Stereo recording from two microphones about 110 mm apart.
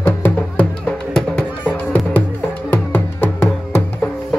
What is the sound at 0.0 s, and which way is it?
Music, 20° left (ahead or behind).